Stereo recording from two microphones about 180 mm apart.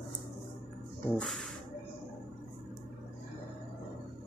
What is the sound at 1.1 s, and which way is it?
Speech, centre (ahead or behind).